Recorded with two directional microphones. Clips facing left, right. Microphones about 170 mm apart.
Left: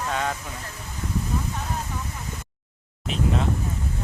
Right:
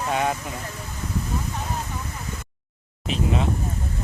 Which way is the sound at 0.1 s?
15° right (ahead or behind).